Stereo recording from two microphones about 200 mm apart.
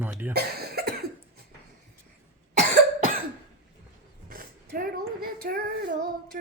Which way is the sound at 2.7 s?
45° right (ahead or behind).